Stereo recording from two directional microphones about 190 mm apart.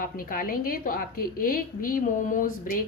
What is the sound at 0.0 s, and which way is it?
A woman's voice, 45° left (ahead or behind).